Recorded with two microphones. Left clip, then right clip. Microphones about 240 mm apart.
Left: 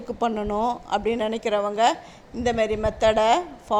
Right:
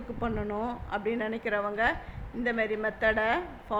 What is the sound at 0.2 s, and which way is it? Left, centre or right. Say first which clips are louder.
A man's voice: left 9 dB; left.